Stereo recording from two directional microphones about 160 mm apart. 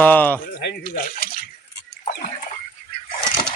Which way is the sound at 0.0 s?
10° left (ahead or behind).